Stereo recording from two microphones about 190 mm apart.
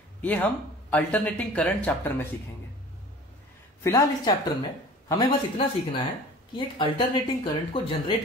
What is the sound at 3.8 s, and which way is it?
Speech, 15° left (ahead or behind).